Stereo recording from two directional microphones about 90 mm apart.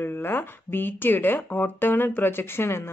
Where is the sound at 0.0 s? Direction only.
25° left (ahead or behind).